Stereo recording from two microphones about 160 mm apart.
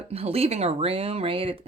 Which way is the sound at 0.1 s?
40° right (ahead or behind).